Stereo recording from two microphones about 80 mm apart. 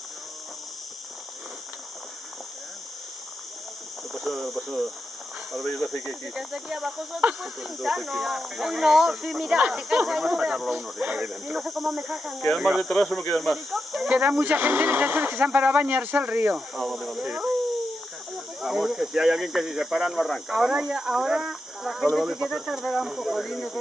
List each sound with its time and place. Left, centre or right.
4.1 s cricket: centre
5.5 s speech: centre
14.0 s speech: centre
16.5 s speech: centre
18.6 s speech: centre